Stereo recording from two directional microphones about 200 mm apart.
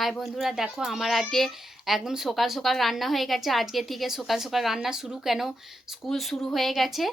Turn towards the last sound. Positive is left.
turn(degrees=0)  # may be behind; listen again after turning